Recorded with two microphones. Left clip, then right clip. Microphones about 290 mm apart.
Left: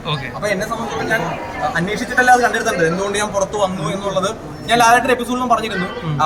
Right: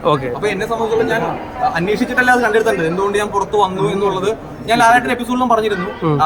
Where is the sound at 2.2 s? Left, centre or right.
Centre.